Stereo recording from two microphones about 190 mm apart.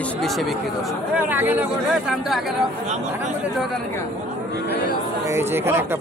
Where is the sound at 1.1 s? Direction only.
10° right (ahead or behind).